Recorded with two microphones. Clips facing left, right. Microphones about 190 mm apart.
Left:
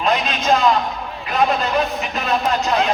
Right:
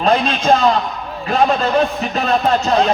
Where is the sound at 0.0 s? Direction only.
35° right (ahead or behind).